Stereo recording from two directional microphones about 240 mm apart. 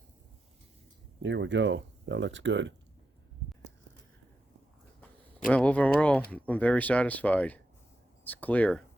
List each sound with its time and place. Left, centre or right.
1.2 s speech: right
5.5 s speech: centre